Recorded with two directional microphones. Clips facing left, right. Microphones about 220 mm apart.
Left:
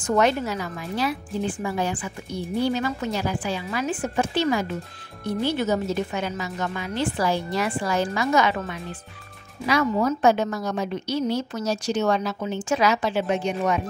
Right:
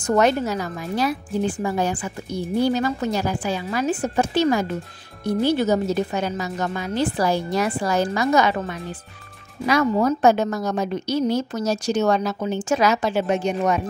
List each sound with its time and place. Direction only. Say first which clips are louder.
0.0 s a woman's voice: right 3 dB; 40° right (ahead or behind)
9.7 s a woman's voice: right 3 dB; 40° right (ahead or behind)